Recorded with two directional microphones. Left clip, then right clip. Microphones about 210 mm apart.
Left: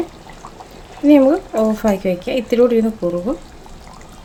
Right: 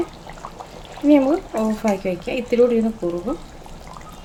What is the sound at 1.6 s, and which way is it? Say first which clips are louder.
Speech: left 5 dB; 20° left (ahead or behind).